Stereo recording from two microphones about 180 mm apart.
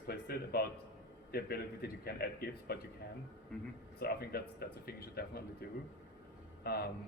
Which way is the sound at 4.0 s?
60° left (ahead or behind).